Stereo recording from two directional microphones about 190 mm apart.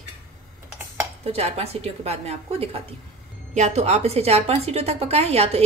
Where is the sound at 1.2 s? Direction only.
30° right (ahead or behind).